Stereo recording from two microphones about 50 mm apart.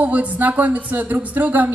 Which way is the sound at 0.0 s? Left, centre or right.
Right.